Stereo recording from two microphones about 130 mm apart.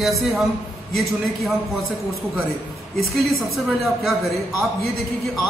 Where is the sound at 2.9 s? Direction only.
Centre (ahead or behind).